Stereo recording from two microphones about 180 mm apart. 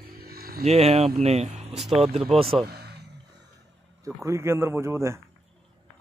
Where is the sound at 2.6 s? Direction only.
65° right (ahead or behind).